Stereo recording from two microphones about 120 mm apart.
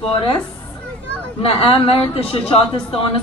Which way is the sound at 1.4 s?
50° left (ahead or behind).